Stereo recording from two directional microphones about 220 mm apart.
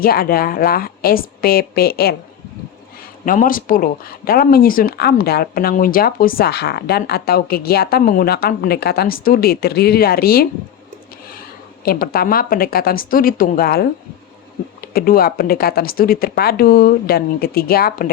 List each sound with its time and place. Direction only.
0.0 s speech: 40° left (ahead or behind)
3.2 s a woman's voice: 40° left (ahead or behind)
11.9 s a woman's voice: 40° left (ahead or behind)